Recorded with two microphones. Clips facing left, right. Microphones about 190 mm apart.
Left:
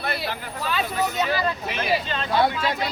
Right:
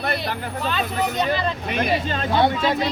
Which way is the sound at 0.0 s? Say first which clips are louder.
Right 3 dB; 50° right (ahead or behind).